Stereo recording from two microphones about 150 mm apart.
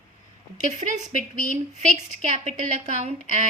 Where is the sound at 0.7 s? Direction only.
55° right (ahead or behind).